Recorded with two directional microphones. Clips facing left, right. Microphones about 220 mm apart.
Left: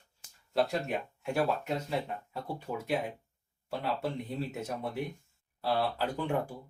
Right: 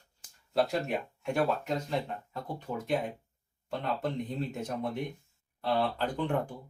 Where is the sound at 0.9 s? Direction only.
5° left (ahead or behind).